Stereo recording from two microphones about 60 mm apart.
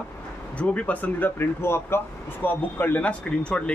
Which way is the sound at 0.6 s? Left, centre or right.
Left.